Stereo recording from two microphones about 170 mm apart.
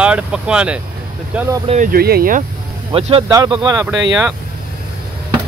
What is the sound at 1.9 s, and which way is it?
Speech, 65° right (ahead or behind).